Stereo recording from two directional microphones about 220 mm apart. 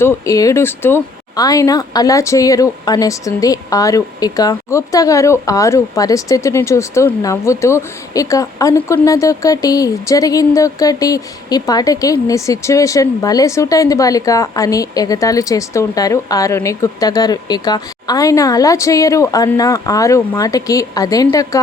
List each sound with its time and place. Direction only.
0.0 s speech: 15° left (ahead or behind)